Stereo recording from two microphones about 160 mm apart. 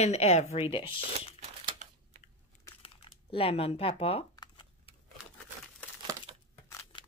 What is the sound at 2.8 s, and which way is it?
Crumpling, 35° left (ahead or behind).